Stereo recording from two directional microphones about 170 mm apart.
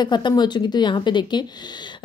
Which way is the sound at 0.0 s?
25° left (ahead or behind).